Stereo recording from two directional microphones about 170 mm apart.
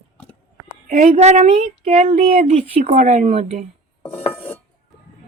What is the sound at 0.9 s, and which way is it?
Speech, 50° right (ahead or behind).